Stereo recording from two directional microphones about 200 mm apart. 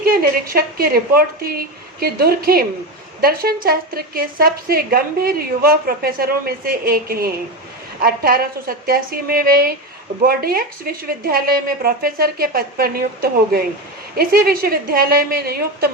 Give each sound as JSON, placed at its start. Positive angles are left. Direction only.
{"t": 0.0, "sound": "a woman's voice", "side_deg": -50}